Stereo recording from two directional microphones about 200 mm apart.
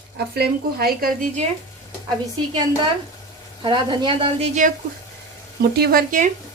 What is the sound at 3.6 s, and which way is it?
Speech, 25° right (ahead or behind).